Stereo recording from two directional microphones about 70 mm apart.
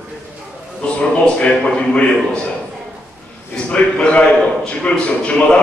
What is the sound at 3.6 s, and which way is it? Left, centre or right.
A man's voice, centre.